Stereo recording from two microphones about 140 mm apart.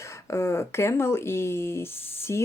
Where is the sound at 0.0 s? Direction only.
20° left (ahead or behind).